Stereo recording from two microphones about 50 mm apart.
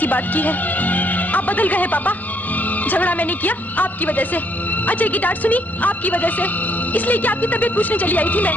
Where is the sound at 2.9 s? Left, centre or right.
Left.